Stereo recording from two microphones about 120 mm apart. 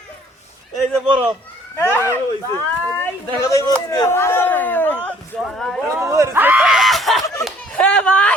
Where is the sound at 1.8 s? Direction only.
20° left (ahead or behind).